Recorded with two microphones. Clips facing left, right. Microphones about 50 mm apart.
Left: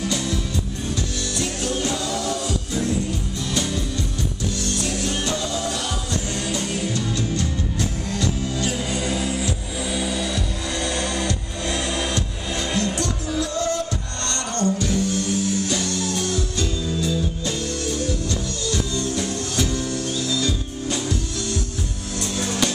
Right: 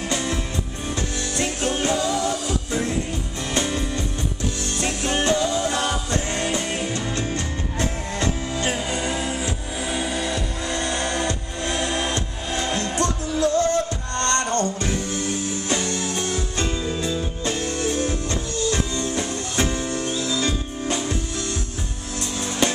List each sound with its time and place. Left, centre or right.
0.0 s music: right
1.4 s music: right
22.4 s music: right